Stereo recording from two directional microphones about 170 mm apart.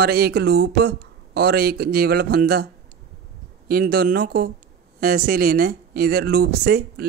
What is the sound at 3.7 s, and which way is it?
Speech, 65° right (ahead or behind).